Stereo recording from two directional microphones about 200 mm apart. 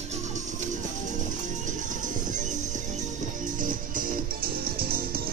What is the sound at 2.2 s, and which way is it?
Music, 40° right (ahead or behind).